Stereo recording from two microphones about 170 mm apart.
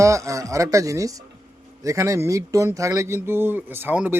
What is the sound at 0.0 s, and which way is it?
Speech, 20° right (ahead or behind).